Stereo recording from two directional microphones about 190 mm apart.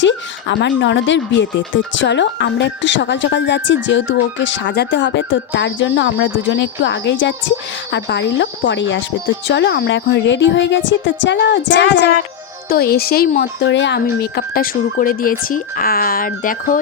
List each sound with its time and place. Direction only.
0.0 s speech: 70° left (ahead or behind)
12.6 s speech: 55° left (ahead or behind)